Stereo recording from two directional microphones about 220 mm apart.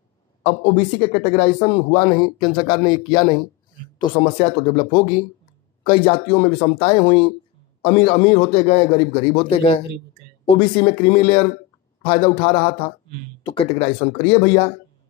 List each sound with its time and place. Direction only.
0.4 s speech: 30° left (ahead or behind)